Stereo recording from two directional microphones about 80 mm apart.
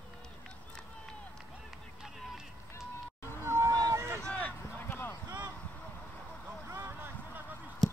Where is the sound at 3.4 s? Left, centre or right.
Right.